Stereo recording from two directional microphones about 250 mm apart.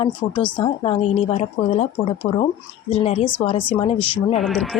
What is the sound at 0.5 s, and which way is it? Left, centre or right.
A woman's voice, left.